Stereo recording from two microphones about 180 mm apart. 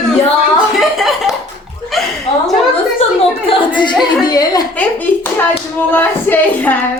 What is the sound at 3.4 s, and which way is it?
Speech, 25° left (ahead or behind).